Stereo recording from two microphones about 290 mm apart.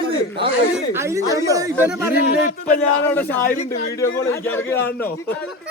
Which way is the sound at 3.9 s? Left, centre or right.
Centre.